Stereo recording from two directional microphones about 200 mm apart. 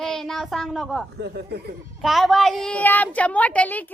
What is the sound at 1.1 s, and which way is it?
Speech, 55° right (ahead or behind).